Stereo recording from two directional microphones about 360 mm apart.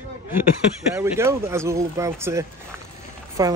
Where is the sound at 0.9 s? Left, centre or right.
Centre.